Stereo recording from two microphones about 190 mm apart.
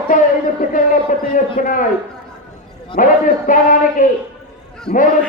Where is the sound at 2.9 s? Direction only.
45° left (ahead or behind).